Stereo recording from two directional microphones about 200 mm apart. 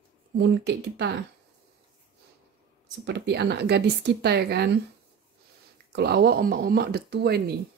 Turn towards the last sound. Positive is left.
turn(degrees=-50)  # may be behind; listen again after turning